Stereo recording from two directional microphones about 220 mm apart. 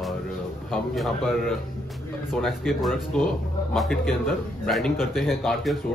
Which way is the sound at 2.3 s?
Centre (ahead or behind).